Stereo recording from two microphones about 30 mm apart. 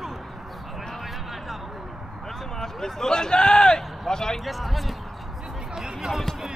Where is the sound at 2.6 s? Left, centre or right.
Centre.